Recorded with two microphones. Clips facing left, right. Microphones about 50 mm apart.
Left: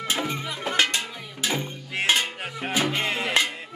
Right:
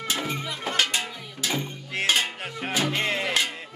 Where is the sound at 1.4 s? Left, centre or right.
Centre.